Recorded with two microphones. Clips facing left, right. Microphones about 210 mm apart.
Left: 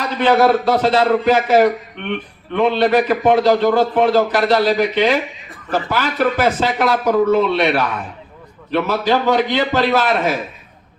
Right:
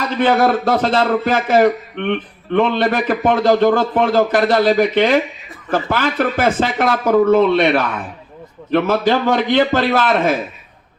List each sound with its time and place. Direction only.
0.0 s a man's voice: 50° right (ahead or behind)